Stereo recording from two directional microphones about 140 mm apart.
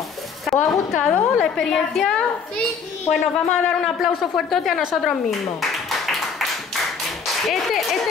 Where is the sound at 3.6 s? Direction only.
Centre (ahead or behind).